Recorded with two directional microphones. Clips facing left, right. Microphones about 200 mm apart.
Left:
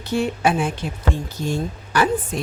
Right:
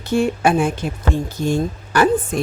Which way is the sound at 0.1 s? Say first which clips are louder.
Right 4 dB; 45° right (ahead or behind).